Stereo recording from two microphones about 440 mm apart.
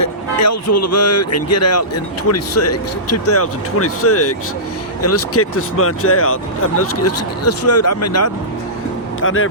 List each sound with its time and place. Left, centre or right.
0.0 s speech: left